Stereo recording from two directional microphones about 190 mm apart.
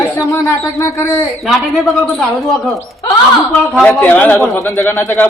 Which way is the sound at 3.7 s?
5° left (ahead or behind).